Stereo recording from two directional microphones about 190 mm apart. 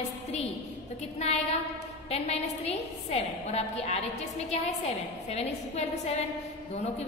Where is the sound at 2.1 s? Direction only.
35° left (ahead or behind).